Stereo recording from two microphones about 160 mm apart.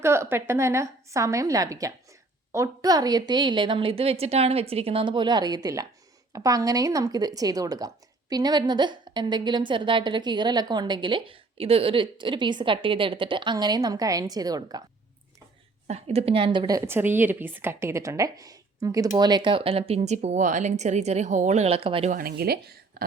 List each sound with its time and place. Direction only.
0.0 s speech: 15° right (ahead or behind)
15.9 s a woman's voice: 40° right (ahead or behind)
22.1 s a woman's voice: 70° right (ahead or behind)